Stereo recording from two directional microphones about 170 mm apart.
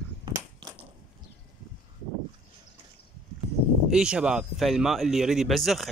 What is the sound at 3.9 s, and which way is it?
Speech, 5° right (ahead or behind).